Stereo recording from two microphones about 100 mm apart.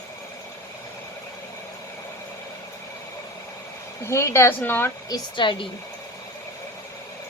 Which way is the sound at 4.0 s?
30° left (ahead or behind).